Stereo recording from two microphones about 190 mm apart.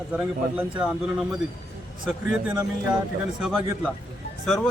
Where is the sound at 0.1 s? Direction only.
5° right (ahead or behind).